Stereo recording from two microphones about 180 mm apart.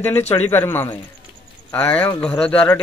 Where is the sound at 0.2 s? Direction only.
40° left (ahead or behind).